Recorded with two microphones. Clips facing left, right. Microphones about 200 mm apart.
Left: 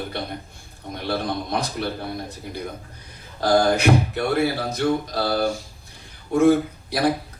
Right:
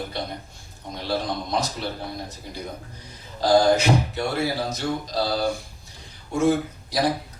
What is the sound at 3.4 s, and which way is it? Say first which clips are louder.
A man's voice: even; 60° left (ahead or behind).